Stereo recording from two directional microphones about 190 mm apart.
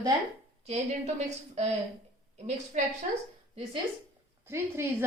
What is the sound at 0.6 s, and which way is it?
A woman's voice, 35° right (ahead or behind).